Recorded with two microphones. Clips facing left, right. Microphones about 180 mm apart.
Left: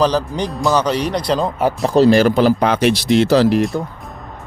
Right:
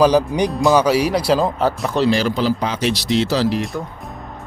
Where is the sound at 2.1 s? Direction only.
55° left (ahead or behind).